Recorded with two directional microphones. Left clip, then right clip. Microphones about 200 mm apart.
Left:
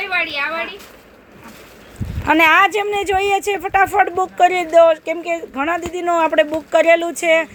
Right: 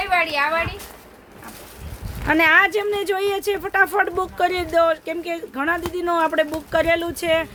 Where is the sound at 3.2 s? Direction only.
Centre (ahead or behind).